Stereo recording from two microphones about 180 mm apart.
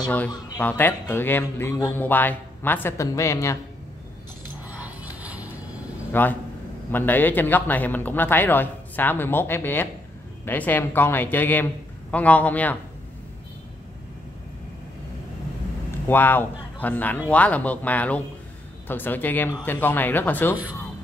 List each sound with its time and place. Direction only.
0.6 s a man's voice: 10° left (ahead or behind)
4.6 s music: 10° right (ahead or behind)
6.1 s a man's voice: 10° left (ahead or behind)
16.1 s a man's voice: 10° left (ahead or behind)